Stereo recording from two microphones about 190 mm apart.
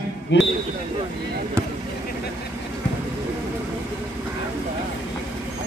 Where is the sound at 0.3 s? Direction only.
70° left (ahead or behind).